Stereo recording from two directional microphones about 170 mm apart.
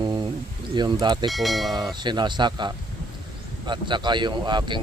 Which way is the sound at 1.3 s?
Centre (ahead or behind).